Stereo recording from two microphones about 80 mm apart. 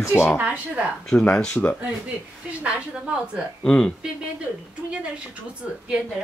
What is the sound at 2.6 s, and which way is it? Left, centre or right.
Speech, centre.